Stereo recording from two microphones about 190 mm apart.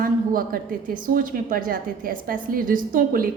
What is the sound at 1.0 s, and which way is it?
A woman's voice, 45° right (ahead or behind).